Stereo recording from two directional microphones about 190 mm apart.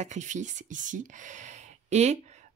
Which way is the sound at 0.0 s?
40° right (ahead or behind).